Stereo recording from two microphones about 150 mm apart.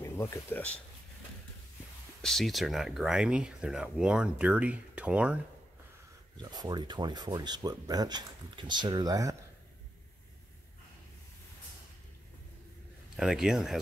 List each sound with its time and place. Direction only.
0.0 s speech: 15° left (ahead or behind)
2.2 s speech: centre (ahead or behind)
6.4 s speech: 25° right (ahead or behind)
13.1 s speech: 5° right (ahead or behind)